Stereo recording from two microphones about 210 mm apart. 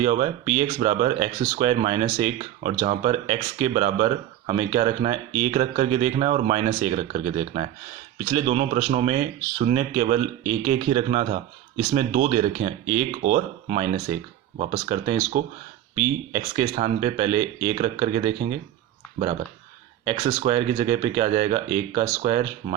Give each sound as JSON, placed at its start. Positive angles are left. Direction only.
{"t": 0.0, "sound": "speech", "side_deg": -30}
{"t": 20.1, "sound": "speech", "side_deg": -25}